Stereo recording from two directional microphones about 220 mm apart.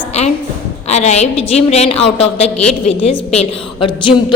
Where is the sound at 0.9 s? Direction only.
30° left (ahead or behind).